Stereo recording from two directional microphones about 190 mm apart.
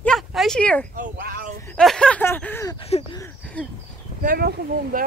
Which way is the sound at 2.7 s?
30° left (ahead or behind).